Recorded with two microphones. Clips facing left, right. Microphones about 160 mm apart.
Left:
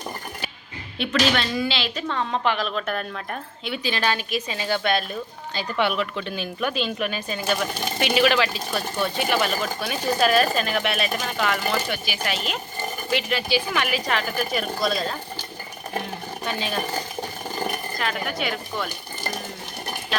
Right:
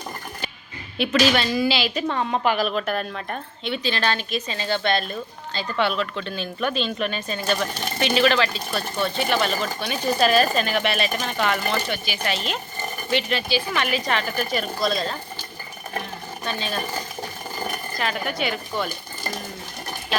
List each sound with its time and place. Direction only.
0.9 s a woman's voice: 5° right (ahead or behind)
16.4 s speech: 15° left (ahead or behind)
18.0 s a woman's voice: centre (ahead or behind)